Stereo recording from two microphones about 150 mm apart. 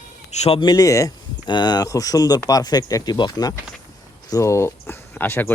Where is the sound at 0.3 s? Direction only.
45° left (ahead or behind).